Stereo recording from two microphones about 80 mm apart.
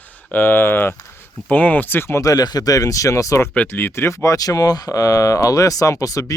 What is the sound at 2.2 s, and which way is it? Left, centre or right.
Speech, left.